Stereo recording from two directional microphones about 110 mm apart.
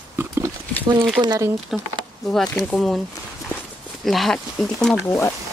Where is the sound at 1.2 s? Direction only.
40° right (ahead or behind).